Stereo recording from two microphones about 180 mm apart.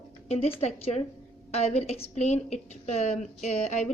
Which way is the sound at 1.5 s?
35° left (ahead or behind).